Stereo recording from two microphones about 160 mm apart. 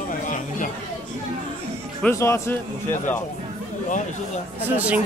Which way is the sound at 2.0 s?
15° left (ahead or behind).